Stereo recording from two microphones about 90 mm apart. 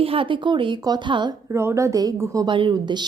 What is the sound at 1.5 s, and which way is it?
Speech, 35° right (ahead or behind).